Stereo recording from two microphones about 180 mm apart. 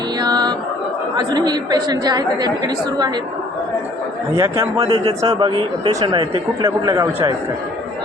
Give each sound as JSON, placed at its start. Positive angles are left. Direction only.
{"t": 0.2, "sound": "a sound", "side_deg": -20}
{"t": 1.1, "sound": "a man's voice", "side_deg": -25}
{"t": 4.4, "sound": "a man's voice", "side_deg": -15}
{"t": 4.8, "sound": "a man's voice", "side_deg": -30}